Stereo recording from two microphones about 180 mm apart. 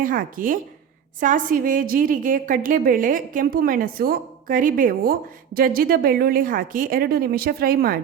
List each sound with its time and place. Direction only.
0.0 s a woman's voice: 50° right (ahead or behind)